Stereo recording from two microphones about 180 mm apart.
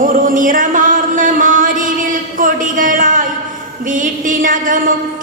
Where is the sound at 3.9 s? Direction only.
45° right (ahead or behind).